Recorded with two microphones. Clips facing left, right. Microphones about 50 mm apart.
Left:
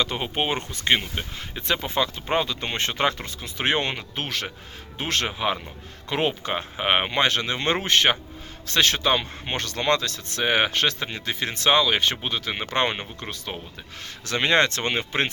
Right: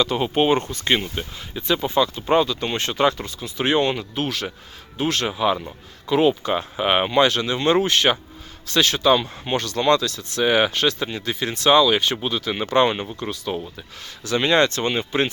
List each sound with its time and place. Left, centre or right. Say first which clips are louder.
0.0 s speech: right 6 dB; centre
1.4 s speech: right 4 dB; left
2.2 s speech: right 6 dB; left
5.3 s speech: right 5 dB; left
6.1 s speech: right 7 dB; left
6.6 s speech: right 3 dB; left
14.0 s speech: right 3 dB; left